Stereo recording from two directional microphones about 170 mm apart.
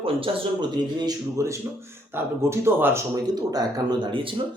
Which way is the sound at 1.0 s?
20° right (ahead or behind).